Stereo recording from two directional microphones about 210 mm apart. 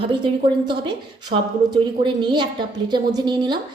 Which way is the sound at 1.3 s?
30° right (ahead or behind).